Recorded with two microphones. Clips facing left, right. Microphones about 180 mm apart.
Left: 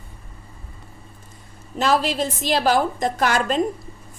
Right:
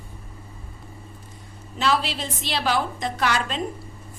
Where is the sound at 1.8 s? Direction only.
45° left (ahead or behind).